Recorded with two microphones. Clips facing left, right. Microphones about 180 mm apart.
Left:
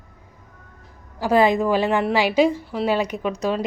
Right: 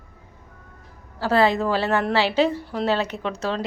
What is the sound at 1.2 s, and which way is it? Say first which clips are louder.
A woman's voice: left 2 dB; 15° left (ahead or behind).